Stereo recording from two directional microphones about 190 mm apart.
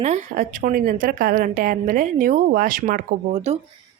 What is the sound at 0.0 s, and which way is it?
A woman's voice, 40° right (ahead or behind).